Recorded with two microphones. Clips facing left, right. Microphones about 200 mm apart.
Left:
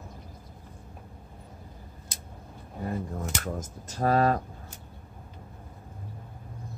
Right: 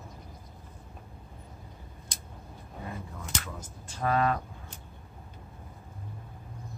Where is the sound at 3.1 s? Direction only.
45° left (ahead or behind).